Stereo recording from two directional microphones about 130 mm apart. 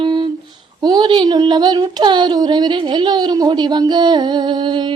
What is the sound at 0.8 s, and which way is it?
Child singing, 30° right (ahead or behind).